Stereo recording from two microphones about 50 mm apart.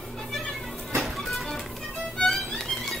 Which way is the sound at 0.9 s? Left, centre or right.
Centre.